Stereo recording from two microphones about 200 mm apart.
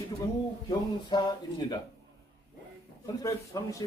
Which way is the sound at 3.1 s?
15° left (ahead or behind).